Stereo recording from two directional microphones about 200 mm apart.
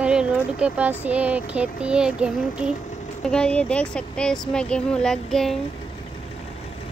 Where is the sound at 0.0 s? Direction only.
5° right (ahead or behind).